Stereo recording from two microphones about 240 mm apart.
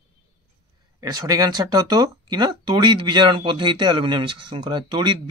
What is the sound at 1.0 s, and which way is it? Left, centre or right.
Speech, centre.